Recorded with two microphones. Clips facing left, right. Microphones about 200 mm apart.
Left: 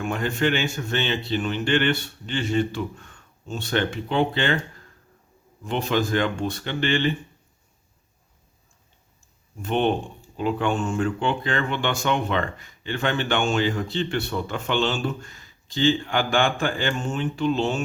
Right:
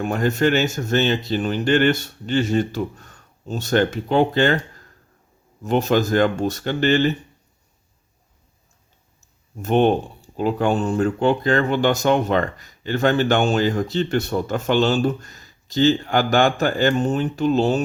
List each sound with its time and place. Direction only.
0.0 s speech: 40° right (ahead or behind)
5.6 s speech: 45° right (ahead or behind)
9.6 s speech: 40° right (ahead or behind)